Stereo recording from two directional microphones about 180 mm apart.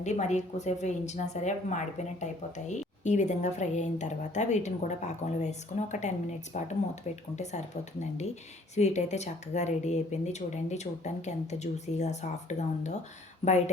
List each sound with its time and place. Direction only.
0.0 s a woman's voice: 40° left (ahead or behind)
8.7 s a woman's voice: 40° left (ahead or behind)